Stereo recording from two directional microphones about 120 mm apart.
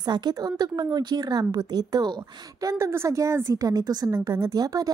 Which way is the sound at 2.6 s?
25° right (ahead or behind).